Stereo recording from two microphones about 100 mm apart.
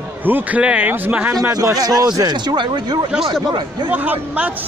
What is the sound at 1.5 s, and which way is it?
Speech, 35° right (ahead or behind).